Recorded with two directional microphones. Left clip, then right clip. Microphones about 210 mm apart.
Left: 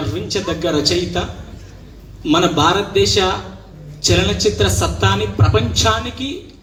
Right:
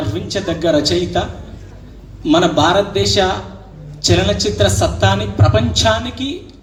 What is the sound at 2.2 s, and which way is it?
Speech, 60° right (ahead or behind).